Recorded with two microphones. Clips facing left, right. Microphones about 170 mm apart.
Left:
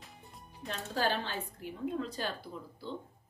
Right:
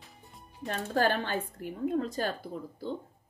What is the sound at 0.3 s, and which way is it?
Music, centre (ahead or behind).